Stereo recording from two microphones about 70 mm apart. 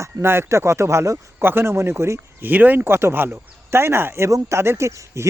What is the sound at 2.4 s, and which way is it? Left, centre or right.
Speech, right.